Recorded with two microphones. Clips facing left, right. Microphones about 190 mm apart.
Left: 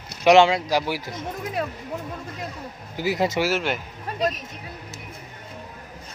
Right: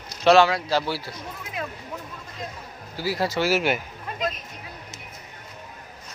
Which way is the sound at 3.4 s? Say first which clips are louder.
Right 2 dB; 5° right (ahead or behind).